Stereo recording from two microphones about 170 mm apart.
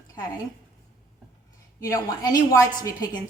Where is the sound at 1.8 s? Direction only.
20° left (ahead or behind).